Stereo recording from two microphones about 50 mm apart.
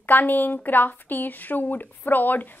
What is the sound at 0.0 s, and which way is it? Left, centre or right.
A woman's voice, left.